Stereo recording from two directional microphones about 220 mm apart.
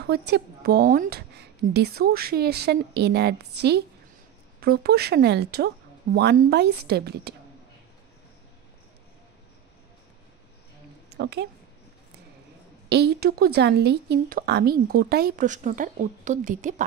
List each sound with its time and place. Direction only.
0.0 s a woman's voice: 50° right (ahead or behind)
11.1 s a woman's voice: 50° right (ahead or behind)
12.9 s a woman's voice: 45° right (ahead or behind)